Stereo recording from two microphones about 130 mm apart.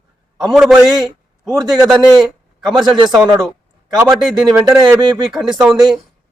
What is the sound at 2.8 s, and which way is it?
Speech, 35° right (ahead or behind).